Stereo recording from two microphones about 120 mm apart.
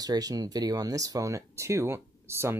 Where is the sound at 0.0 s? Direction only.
30° right (ahead or behind).